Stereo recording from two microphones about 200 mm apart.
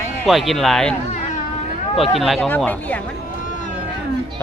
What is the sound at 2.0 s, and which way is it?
A man's voice, centre (ahead or behind).